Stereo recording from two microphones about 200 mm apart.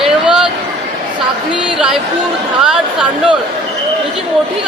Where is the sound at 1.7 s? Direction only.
Centre (ahead or behind).